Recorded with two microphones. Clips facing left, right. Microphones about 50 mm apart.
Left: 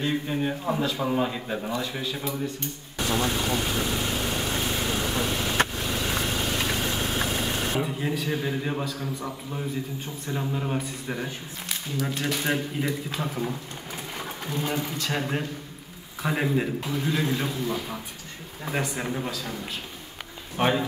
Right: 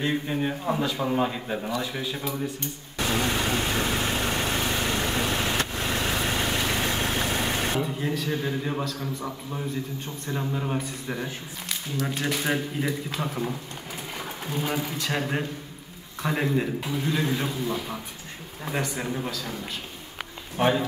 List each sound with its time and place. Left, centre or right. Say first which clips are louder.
0.0 s speech: even; centre
3.2 s speech: even; right
4.6 s vehicle: right 1 dB; right
7.8 s a man's voice: even; centre
18.7 s a man's voice: even; centre